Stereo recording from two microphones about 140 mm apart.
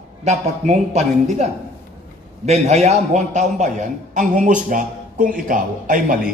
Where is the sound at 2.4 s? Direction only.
50° right (ahead or behind).